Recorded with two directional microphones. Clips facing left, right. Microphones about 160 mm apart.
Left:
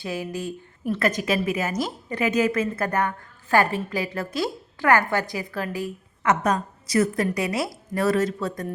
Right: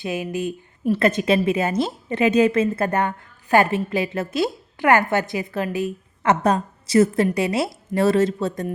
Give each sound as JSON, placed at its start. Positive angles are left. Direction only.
{"t": 0.0, "sound": "a woman's voice", "side_deg": -20}